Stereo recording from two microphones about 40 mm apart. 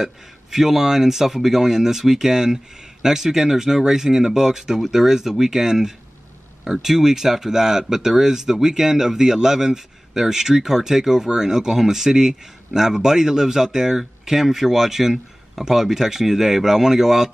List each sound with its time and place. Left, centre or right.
0.0 s speech: centre